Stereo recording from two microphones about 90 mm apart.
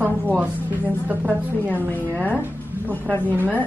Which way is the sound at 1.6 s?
20° left (ahead or behind).